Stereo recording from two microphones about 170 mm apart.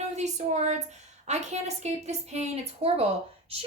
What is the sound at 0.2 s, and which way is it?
Speech, 45° right (ahead or behind).